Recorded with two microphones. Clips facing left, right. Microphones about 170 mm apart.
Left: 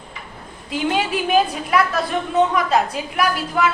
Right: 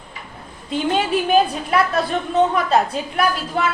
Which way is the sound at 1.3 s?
30° right (ahead or behind).